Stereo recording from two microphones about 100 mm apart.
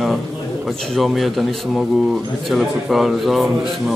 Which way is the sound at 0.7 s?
Centre (ahead or behind).